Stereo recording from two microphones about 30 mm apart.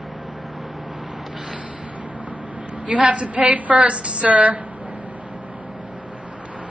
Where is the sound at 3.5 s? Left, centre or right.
Right.